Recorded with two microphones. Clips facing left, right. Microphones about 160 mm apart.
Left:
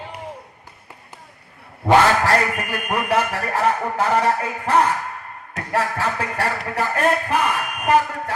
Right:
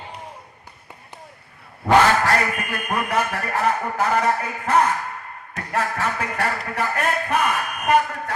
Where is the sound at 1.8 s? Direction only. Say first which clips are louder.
Left 1 dB; 30° left (ahead or behind).